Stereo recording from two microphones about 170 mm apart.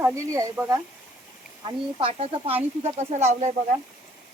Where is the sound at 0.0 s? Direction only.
20° right (ahead or behind).